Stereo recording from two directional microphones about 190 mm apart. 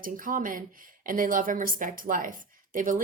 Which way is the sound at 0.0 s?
45° right (ahead or behind).